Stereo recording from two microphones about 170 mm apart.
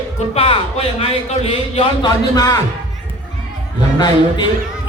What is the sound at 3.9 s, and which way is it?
Speech, 25° left (ahead or behind).